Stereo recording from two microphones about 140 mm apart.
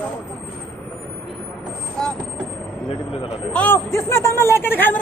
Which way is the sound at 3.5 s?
15° left (ahead or behind).